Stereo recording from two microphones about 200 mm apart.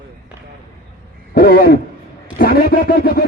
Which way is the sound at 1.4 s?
45° left (ahead or behind).